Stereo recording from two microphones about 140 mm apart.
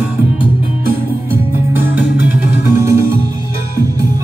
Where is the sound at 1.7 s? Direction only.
15° right (ahead or behind).